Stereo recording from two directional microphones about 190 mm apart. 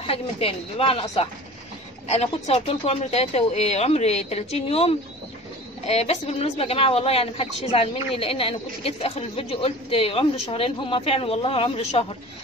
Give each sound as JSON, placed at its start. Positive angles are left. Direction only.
{"t": 0.0, "sound": "speech", "side_deg": 30}
{"t": 2.0, "sound": "a woman's voice", "side_deg": 35}